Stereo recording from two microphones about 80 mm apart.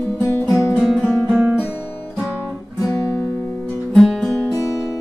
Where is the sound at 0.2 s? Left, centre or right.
Left.